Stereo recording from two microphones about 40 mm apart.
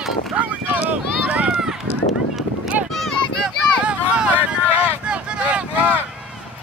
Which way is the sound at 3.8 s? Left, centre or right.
Right.